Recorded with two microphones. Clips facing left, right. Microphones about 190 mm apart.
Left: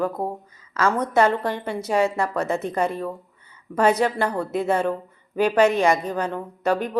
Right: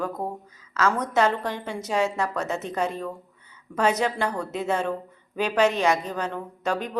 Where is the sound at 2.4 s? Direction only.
55° left (ahead or behind).